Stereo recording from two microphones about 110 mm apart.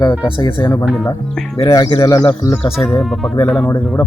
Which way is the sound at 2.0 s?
35° left (ahead or behind).